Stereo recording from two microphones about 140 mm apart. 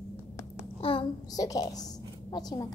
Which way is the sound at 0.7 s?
40° left (ahead or behind).